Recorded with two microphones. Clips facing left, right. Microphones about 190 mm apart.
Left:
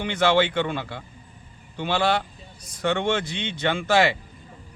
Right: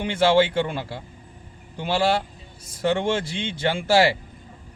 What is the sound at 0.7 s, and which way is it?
Speech, 30° right (ahead or behind).